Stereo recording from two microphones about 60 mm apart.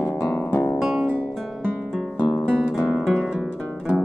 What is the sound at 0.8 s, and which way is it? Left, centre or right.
Music, centre.